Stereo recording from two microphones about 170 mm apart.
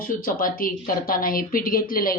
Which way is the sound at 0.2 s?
55° left (ahead or behind).